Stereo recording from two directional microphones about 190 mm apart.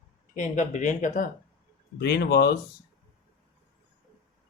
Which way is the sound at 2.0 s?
60° left (ahead or behind).